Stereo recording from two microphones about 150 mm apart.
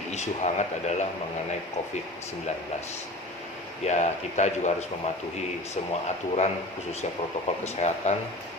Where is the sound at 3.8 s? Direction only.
50° left (ahead or behind).